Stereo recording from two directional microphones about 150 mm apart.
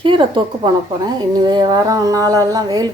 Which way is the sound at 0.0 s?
35° right (ahead or behind).